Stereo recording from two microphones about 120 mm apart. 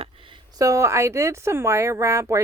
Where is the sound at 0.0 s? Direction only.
45° right (ahead or behind).